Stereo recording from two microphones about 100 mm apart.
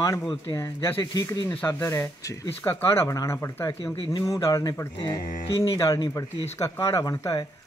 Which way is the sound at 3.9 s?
65° left (ahead or behind).